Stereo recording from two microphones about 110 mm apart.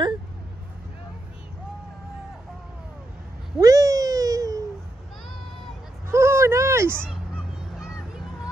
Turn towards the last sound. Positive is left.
turn(degrees=-25)  # may be behind; listen again after turning